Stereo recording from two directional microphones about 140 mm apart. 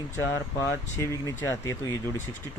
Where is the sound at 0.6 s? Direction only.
20° left (ahead or behind).